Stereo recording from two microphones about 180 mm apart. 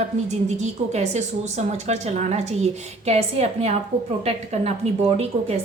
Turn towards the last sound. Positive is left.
turn(degrees=-35)  # may be behind; listen again after turning